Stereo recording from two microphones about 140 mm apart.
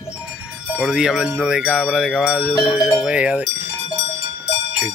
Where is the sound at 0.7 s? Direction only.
5° right (ahead or behind).